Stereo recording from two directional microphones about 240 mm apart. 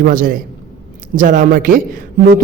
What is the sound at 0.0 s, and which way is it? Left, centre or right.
A man's voice, right.